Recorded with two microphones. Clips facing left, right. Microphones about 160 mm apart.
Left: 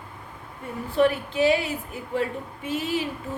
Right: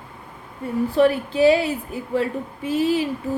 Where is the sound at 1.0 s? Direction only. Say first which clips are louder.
Right 3 dB; 35° right (ahead or behind).